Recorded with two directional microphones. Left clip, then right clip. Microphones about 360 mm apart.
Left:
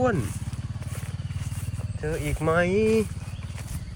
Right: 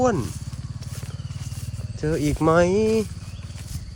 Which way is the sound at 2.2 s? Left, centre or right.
Centre.